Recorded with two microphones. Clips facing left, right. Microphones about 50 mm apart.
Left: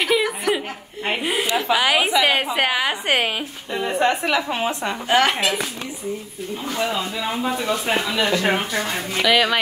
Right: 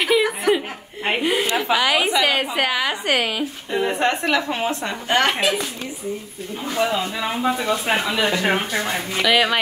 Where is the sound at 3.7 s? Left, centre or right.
Centre.